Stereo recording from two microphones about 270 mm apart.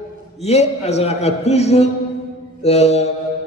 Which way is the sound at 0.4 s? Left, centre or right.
Left.